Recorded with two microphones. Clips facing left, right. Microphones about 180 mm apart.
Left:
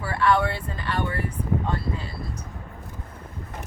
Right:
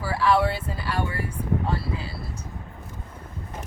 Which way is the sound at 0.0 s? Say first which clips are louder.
Even; 5° right (ahead or behind).